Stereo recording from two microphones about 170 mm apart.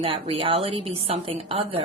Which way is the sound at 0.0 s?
30° right (ahead or behind).